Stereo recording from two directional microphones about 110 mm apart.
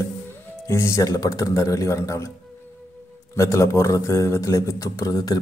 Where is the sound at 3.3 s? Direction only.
30° left (ahead or behind).